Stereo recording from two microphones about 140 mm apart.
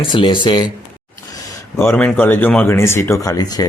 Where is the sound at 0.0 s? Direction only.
35° left (ahead or behind).